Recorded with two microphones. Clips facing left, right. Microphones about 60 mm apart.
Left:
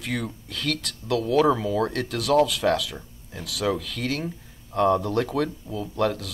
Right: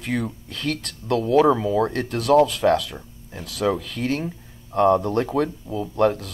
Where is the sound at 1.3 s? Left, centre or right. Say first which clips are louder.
Right 4 dB; centre.